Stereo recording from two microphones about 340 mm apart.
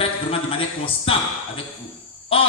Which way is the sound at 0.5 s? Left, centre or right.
Centre.